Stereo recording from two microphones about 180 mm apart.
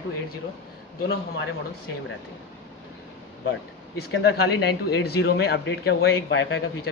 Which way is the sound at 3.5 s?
65° left (ahead or behind).